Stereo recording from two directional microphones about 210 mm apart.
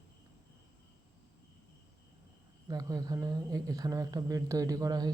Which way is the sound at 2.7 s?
15° right (ahead or behind).